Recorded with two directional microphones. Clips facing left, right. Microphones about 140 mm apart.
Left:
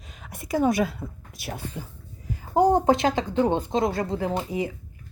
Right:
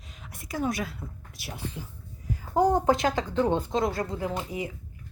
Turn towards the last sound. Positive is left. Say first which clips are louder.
# left 5 dB
turn(degrees=30)  # may be behind; listen again after turning